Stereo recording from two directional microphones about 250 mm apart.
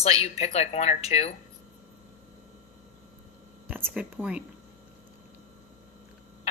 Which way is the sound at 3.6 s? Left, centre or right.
Centre.